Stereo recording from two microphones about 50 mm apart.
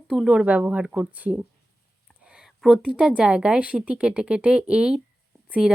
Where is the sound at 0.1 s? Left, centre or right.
Centre.